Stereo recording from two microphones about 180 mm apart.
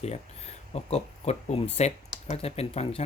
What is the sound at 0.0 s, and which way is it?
Speech, 35° left (ahead or behind).